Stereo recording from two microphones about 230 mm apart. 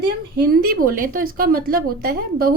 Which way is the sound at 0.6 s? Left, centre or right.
Right.